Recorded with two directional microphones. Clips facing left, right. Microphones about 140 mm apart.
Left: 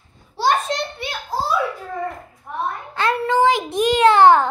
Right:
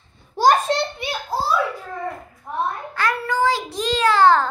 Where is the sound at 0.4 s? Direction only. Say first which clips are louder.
Right 3 dB; 35° right (ahead or behind).